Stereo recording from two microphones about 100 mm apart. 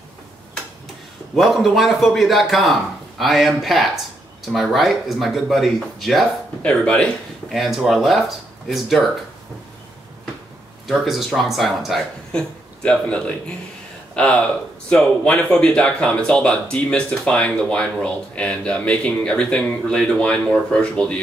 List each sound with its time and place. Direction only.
1.3 s a man's voice: centre (ahead or behind)
6.6 s speech: 10° left (ahead or behind)
7.5 s a man's voice: 5° right (ahead or behind)
10.9 s a man's voice: centre (ahead or behind)
12.8 s speech: 10° left (ahead or behind)